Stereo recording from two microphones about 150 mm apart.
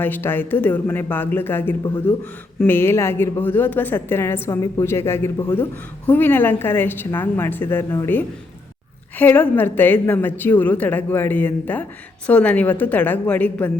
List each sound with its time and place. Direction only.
0.0 s a woman's voice: 15° left (ahead or behind)